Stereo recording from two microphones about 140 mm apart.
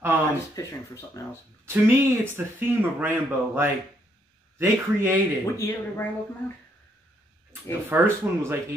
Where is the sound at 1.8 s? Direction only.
15° right (ahead or behind).